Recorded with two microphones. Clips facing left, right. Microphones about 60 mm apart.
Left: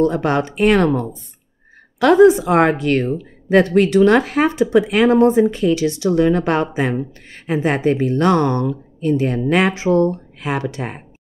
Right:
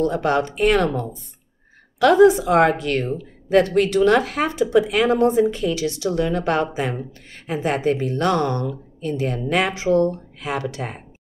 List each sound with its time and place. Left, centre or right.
0.1 s speech: left
2.0 s speech: left